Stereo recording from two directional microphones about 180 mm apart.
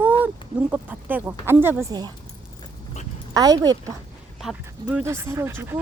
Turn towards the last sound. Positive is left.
turn(degrees=-15)  # may be behind; listen again after turning